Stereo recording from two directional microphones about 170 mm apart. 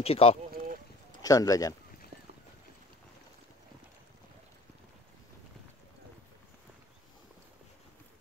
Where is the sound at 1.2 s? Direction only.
20° left (ahead or behind).